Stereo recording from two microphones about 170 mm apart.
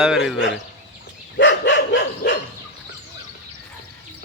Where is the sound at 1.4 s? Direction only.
90° left.